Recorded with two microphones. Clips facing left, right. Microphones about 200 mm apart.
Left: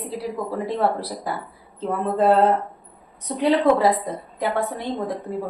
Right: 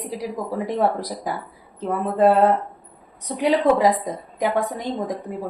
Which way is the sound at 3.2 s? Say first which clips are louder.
Even; 15° right (ahead or behind).